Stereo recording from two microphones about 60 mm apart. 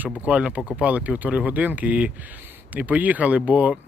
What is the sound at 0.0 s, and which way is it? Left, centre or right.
Speech, right.